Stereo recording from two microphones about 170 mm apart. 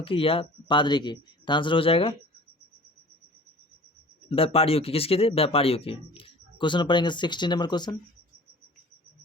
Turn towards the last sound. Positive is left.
turn(degrees=25)  # may be behind; listen again after turning